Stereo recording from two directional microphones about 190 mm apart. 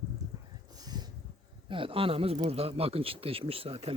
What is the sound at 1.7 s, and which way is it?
Speech, 30° right (ahead or behind).